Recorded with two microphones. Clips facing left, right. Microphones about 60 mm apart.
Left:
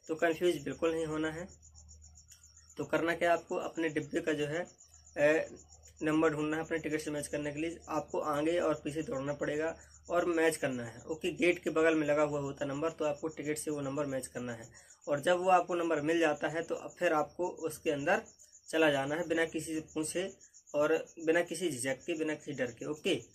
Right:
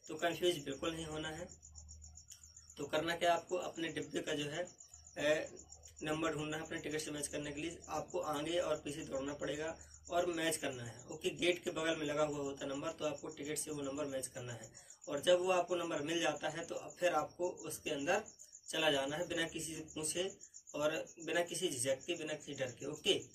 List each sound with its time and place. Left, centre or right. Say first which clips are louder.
0.0 s a man's voice: left 6 dB; left
2.7 s a man's voice: left 6 dB; left